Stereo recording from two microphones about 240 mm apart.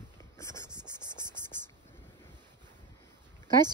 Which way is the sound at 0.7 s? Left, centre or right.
Centre.